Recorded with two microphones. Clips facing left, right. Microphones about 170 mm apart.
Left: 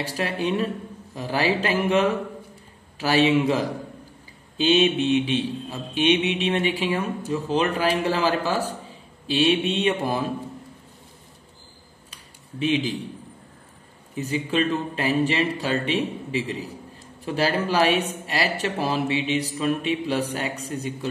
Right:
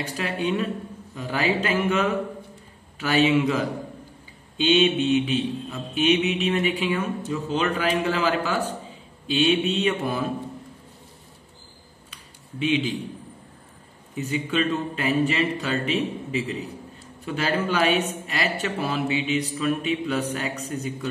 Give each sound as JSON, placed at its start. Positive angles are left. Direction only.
{"t": 0.0, "sound": "a man's voice", "side_deg": 35}
{"t": 12.1, "sound": "a sound", "side_deg": 35}
{"t": 14.1, "sound": "a man's voice", "side_deg": 35}